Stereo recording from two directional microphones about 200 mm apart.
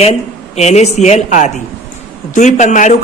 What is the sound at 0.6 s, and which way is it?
A man's voice, 30° left (ahead or behind).